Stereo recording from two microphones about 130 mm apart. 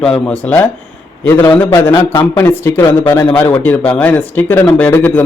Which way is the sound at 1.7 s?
20° left (ahead or behind).